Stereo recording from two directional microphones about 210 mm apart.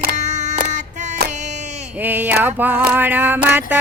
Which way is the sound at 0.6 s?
35° right (ahead or behind).